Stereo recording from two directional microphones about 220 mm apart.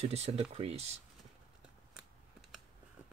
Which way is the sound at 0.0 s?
30° right (ahead or behind).